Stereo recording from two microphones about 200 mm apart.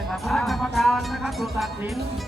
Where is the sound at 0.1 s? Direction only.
Centre (ahead or behind).